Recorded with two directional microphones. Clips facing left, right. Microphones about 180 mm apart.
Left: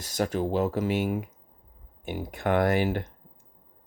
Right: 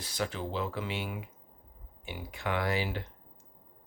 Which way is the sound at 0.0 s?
45° left (ahead or behind).